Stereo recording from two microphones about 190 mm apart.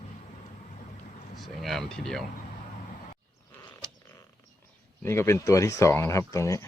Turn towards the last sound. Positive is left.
turn(degrees=15)  # may be behind; listen again after turning